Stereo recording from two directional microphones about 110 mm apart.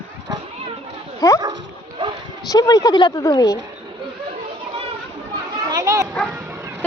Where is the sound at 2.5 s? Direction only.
35° left (ahead or behind).